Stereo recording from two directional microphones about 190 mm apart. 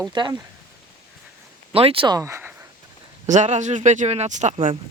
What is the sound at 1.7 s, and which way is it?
Speech, 30° right (ahead or behind).